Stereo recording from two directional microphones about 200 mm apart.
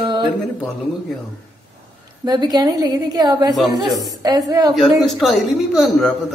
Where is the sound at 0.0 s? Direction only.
25° right (ahead or behind).